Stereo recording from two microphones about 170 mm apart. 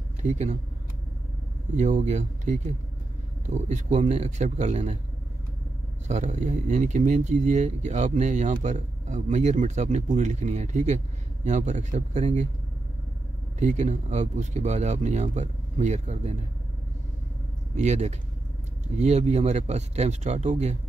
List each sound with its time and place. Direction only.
0.2 s speech: 45° right (ahead or behind)
1.8 s speech: 45° right (ahead or behind)
6.0 s speech: 45° right (ahead or behind)
13.6 s speech: 45° right (ahead or behind)
17.7 s speech: 40° right (ahead or behind)